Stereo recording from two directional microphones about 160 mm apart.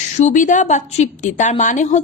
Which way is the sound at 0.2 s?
50° left (ahead or behind).